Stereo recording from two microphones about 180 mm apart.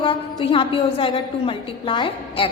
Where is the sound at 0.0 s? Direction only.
25° left (ahead or behind).